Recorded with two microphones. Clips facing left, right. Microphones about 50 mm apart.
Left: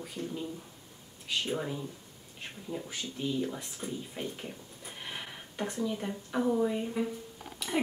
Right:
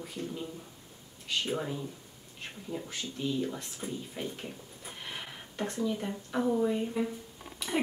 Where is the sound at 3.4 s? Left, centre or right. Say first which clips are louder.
Even; centre.